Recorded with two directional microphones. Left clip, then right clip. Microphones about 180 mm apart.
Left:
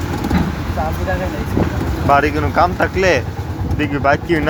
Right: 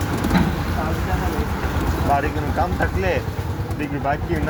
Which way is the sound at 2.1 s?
35° left (ahead or behind).